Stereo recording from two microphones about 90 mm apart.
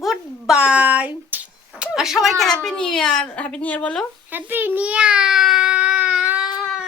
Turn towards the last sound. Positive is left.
turn(degrees=-5)  # may be behind; listen again after turning